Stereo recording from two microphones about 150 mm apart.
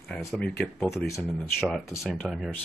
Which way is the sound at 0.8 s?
20° left (ahead or behind).